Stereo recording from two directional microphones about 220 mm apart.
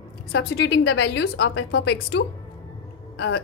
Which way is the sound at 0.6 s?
55° left (ahead or behind).